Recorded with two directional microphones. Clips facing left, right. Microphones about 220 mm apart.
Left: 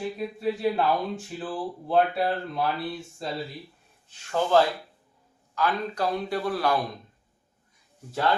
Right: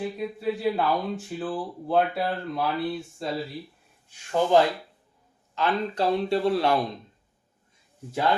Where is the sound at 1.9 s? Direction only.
Centre (ahead or behind).